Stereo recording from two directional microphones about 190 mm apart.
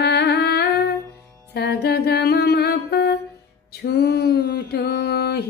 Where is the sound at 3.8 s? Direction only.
55° left (ahead or behind).